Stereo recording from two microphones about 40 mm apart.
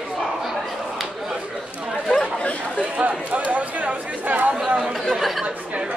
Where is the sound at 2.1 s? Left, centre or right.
Centre.